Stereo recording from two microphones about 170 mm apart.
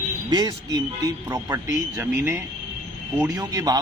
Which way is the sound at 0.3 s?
25° right (ahead or behind).